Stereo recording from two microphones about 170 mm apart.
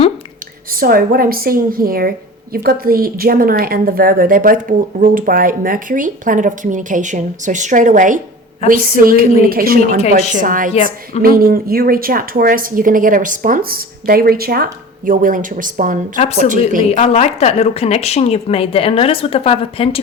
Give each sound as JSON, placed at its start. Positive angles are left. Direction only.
{"t": 0.7, "sound": "a woman's voice", "side_deg": -60}
{"t": 16.8, "sound": "a woman's voice", "side_deg": 40}